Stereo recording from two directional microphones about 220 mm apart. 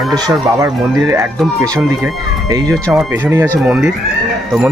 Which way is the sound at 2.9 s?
5° right (ahead or behind).